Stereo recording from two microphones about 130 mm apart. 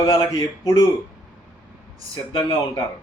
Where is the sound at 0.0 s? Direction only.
35° left (ahead or behind).